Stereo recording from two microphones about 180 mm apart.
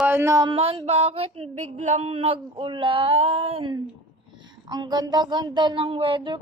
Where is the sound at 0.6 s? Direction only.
35° right (ahead or behind).